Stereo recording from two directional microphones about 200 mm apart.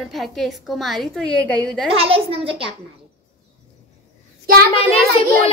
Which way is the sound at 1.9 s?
30° right (ahead or behind).